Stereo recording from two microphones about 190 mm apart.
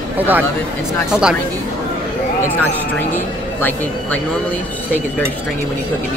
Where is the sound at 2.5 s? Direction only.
10° left (ahead or behind).